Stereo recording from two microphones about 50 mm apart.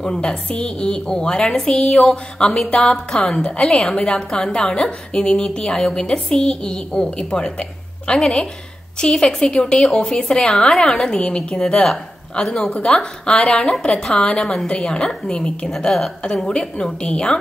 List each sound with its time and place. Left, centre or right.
0.0 s a woman's voice: centre
12.7 s a woman's voice: centre
15.7 s a woman's voice: centre